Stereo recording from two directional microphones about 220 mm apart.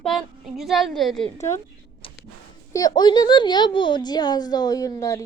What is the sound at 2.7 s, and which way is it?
A woman's voice, 20° left (ahead or behind).